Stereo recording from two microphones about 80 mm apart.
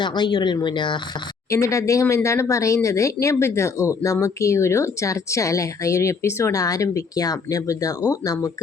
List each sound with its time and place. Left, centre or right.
0.0 s speech: left
1.5 s speech: left